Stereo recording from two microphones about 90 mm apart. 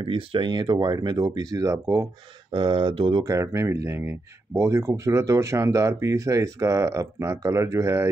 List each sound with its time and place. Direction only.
0.0 s speech: 80° right; by 2.0 s 35° right (ahead or behind)
2.5 s speech: 60° right (ahead or behind)
3.2 s speech: 35° right (ahead or behind)